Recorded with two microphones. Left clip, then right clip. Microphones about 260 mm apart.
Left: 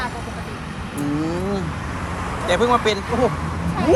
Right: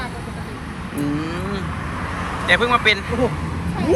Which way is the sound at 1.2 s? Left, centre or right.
Centre.